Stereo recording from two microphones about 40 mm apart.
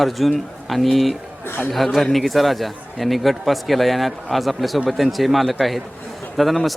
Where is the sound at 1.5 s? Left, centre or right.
Left.